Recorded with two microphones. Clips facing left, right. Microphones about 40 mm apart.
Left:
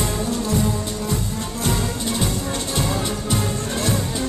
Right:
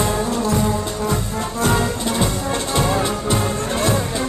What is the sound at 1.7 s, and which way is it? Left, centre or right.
Music, right.